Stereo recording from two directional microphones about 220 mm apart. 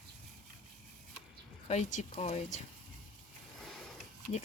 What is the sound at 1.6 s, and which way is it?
Speech, 30° left (ahead or behind).